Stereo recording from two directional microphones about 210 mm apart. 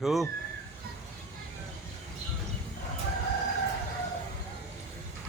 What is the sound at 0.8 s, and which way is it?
Music, 45° right (ahead or behind).